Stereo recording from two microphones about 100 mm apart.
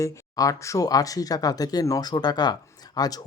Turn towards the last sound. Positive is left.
turn(degrees=40)  # may be behind; listen again after turning